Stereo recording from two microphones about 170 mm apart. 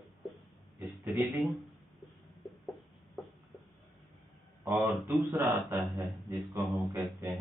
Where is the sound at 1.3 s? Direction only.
Centre (ahead or behind).